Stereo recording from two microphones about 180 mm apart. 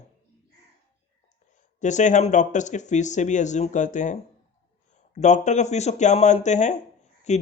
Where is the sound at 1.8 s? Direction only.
40° left (ahead or behind).